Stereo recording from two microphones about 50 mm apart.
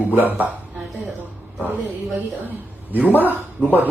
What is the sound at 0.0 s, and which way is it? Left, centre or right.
Speech, right.